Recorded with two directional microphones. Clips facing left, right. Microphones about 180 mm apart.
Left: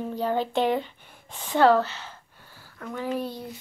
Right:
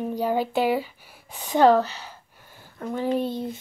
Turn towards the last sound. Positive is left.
turn(degrees=-25)  # may be behind; listen again after turning